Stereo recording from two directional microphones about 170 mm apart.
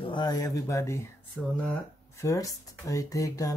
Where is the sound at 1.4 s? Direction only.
5° left (ahead or behind).